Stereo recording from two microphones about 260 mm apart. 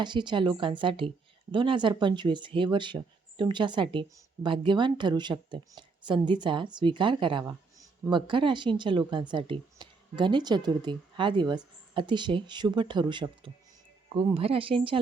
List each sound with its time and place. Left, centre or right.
0.0 s speech: centre